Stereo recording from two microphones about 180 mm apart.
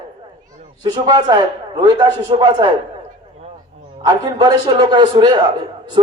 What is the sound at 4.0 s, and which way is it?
A man's voice, 20° right (ahead or behind).